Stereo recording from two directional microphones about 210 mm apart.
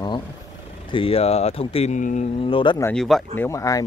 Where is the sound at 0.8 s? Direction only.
25° left (ahead or behind).